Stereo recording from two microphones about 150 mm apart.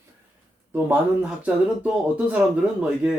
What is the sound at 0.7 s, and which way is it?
Speech, 10° right (ahead or behind).